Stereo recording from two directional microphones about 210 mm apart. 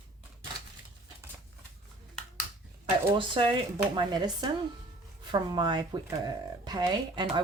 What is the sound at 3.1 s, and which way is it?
Speech, 25° right (ahead or behind).